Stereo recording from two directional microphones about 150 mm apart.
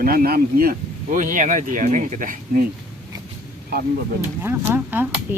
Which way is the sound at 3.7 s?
90° right.